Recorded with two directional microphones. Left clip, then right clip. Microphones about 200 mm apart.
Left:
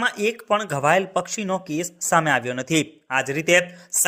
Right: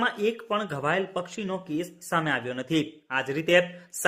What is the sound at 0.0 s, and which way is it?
Speech, 25° left (ahead or behind).